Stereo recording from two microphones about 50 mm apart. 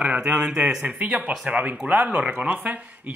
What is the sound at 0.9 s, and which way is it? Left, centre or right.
Speech, right.